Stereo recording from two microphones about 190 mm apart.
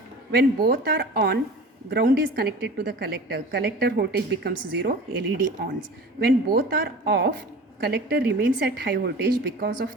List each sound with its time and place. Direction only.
0.3 s a woman's voice: 55° right (ahead or behind)
6.1 s a woman's voice: 55° right (ahead or behind)